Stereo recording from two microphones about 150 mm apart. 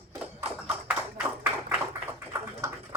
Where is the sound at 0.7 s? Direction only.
10° right (ahead or behind).